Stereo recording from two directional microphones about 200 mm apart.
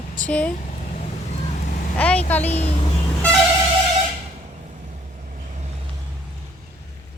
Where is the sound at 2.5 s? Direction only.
30° left (ahead or behind).